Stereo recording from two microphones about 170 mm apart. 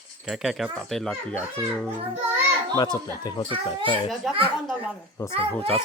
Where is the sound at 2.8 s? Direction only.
20° left (ahead or behind).